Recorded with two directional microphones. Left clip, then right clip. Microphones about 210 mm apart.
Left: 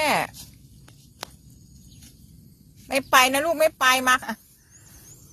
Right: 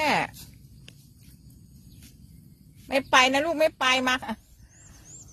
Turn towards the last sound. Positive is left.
turn(degrees=-10)  # may be behind; listen again after turning